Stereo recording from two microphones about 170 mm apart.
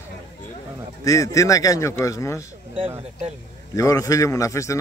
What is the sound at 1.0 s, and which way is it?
Speech, 20° left (ahead or behind).